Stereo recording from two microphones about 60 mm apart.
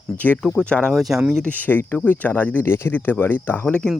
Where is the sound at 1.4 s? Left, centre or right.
Left.